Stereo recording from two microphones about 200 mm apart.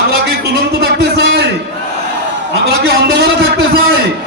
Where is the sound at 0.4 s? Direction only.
50° right (ahead or behind).